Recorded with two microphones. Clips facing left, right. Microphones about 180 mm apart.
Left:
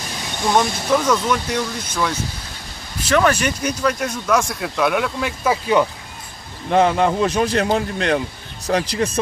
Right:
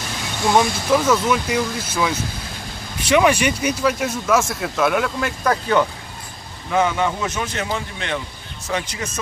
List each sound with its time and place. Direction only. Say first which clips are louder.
0.5 s speech: right 1 dB; 5° right (ahead or behind)
6.7 s a man's voice: left 4 dB; 35° left (ahead or behind)